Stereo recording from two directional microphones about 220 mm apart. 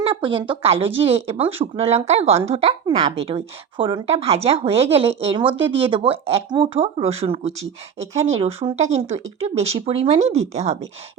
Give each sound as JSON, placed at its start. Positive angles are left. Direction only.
{"t": 0.0, "sound": "a woman's voice", "side_deg": -25}